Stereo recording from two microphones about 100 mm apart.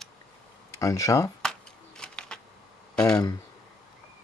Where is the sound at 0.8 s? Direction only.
30° left (ahead or behind).